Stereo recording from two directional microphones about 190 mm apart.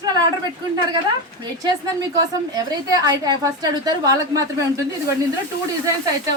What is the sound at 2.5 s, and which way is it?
A woman's voice, 20° right (ahead or behind).